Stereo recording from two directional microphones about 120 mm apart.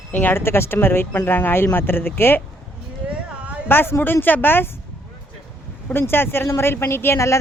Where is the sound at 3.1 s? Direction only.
10° right (ahead or behind).